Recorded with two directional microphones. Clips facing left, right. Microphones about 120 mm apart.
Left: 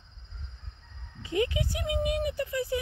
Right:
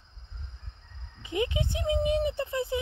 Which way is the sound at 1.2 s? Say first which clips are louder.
Left 1 dB; 20° right (ahead or behind).